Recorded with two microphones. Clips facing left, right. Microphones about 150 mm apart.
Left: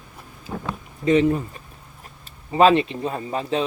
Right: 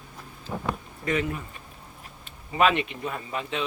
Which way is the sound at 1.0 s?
25° left (ahead or behind).